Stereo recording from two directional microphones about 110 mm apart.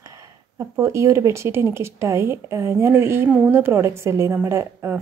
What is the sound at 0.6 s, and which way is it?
Speech, 25° right (ahead or behind).